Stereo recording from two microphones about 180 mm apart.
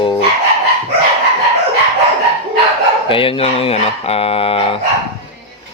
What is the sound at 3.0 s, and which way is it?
Speech, 30° left (ahead or behind).